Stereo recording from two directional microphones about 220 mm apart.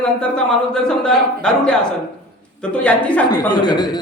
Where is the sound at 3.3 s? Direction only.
20° left (ahead or behind).